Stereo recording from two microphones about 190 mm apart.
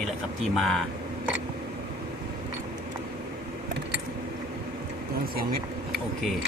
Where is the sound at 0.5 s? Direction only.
Centre (ahead or behind).